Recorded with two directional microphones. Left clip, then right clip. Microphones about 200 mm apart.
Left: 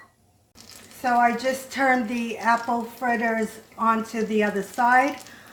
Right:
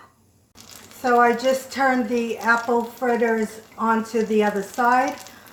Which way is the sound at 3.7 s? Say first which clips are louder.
Right 1 dB; 30° left (ahead or behind).